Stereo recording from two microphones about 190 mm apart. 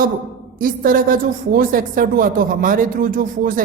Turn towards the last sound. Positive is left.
turn(degrees=-45)  # may be behind; listen again after turning